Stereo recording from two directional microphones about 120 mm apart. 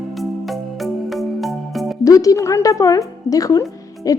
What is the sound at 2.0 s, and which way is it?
A woman's voice, 30° left (ahead or behind).